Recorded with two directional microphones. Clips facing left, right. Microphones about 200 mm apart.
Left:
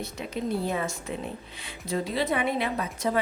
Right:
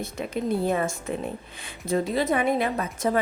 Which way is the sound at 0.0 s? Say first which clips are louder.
Right 3 dB; 50° right (ahead or behind).